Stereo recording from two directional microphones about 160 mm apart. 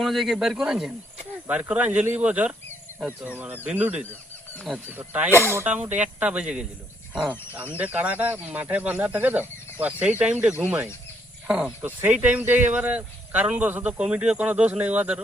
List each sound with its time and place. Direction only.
0.0 s speech: centre (ahead or behind)